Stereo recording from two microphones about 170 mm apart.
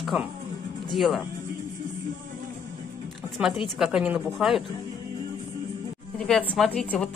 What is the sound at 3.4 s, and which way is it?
A woman's voice, centre (ahead or behind).